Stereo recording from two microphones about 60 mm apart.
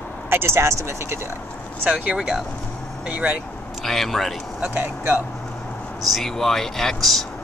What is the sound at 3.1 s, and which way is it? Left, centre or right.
Speech, right.